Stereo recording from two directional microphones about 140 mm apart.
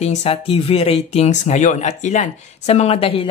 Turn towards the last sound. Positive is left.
turn(degrees=45)  # may be behind; listen again after turning